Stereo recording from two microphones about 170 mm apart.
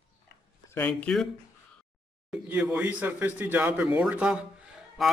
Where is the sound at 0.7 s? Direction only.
5° left (ahead or behind).